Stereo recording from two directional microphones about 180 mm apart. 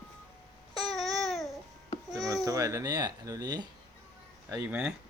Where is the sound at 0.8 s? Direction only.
Centre (ahead or behind).